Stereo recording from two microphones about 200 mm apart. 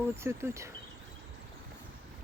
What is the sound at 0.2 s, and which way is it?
Speech, 15° right (ahead or behind).